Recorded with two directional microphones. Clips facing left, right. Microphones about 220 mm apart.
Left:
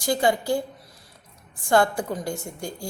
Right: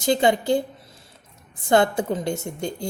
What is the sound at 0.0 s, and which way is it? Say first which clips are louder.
A woman's voice: right 3 dB; 20° right (ahead or behind).